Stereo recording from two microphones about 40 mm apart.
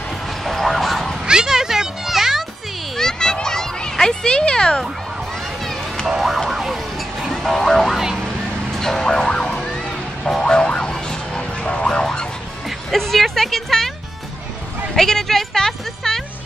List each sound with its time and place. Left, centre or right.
0.4 s a sound: centre
1.2 s music: centre
3.0 s children playing: centre
3.3 s fowl: centre
6.0 s car alarm: centre
6.5 s a sound: centre
7.2 s music: centre
10.4 s music: left
11.7 s boing: left
12.0 s music: centre
12.6 s music: centre
15.0 s a woman's voice: centre